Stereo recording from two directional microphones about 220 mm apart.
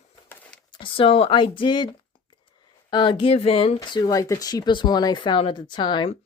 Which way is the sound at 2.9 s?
20° left (ahead or behind).